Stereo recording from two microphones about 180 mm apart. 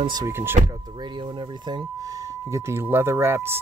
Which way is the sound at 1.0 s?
25° right (ahead or behind).